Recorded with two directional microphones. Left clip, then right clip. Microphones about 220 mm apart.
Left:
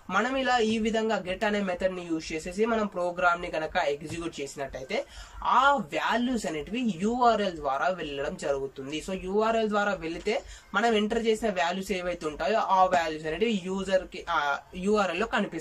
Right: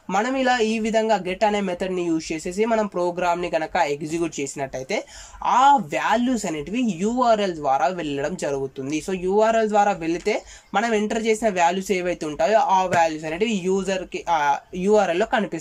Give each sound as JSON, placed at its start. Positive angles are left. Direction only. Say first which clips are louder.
{"t": 0.1, "sound": "speech", "louder": "right 5 dB", "side_deg": -35}
{"t": 9.3, "sound": "speech", "louder": "right 7 dB", "side_deg": -35}